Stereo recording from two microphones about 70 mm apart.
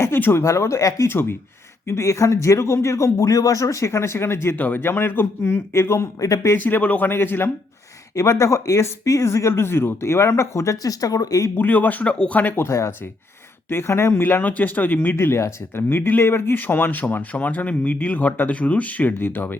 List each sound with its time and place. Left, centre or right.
0.0 s speech: left
0.4 s speech: left
1.0 s a man's voice: left
1.9 s speech: left
4.5 s a man's voice: left
6.6 s a man's voice: left
8.1 s speech: left
11.5 s speech: left
12.6 s a man's voice: left
14.3 s speech: left